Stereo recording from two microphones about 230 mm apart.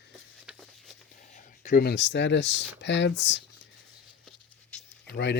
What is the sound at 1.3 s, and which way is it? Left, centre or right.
Speech, left.